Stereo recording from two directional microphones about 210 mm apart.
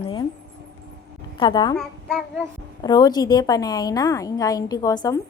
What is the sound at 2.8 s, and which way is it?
A woman's voice, 20° left (ahead or behind).